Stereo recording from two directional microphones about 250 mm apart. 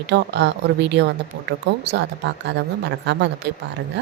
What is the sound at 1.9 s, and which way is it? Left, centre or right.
A woman's voice, right.